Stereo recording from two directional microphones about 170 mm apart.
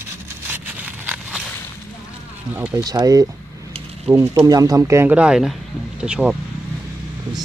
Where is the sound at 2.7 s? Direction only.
20° right (ahead or behind); by 6.3 s 5° right (ahead or behind).